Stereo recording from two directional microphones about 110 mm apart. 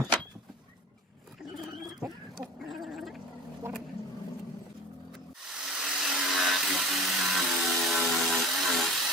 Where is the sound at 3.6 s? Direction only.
20° right (ahead or behind).